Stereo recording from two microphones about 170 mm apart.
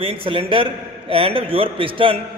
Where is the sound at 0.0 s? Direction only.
30° right (ahead or behind).